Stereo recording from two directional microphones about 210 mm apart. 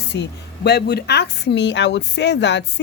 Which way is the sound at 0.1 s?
50° left (ahead or behind).